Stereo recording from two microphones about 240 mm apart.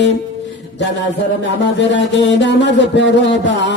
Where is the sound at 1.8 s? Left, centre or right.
Left.